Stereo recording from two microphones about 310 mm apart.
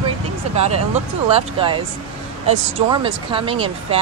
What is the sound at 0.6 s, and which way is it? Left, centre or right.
Speech, centre.